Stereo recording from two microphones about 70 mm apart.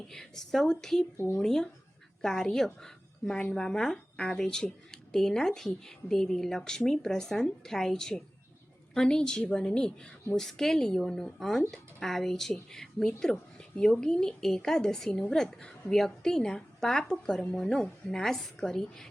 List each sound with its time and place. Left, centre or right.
0.1 s speech: centre
1.1 s speech: left
1.4 s speech: centre
13.6 s a sound: centre
14.0 s a woman's voice: centre